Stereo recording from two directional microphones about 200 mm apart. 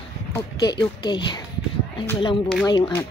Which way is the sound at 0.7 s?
20° left (ahead or behind).